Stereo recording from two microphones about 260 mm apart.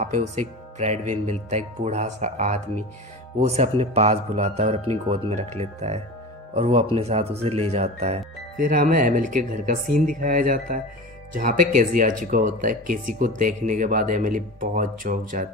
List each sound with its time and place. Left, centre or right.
0.0 s speech: right